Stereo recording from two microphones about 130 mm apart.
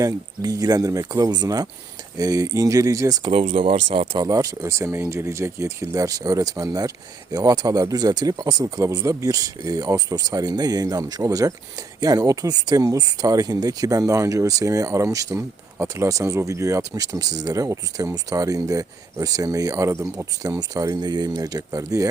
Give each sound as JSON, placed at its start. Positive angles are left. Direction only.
{"t": 0.0, "sound": "speech", "side_deg": -25}
{"t": 3.6, "sound": "speech", "side_deg": -45}
{"t": 4.2, "sound": "speech", "side_deg": -25}